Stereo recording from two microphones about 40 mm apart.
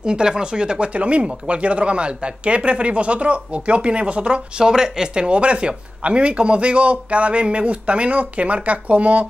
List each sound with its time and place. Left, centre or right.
0.0 s speech: right